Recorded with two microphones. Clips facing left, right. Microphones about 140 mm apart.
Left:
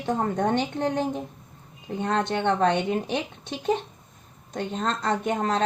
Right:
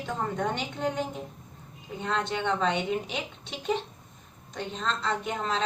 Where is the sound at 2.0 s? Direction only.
50° left (ahead or behind).